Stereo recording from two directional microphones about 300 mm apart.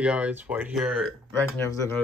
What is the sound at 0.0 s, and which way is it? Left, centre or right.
Speech, centre.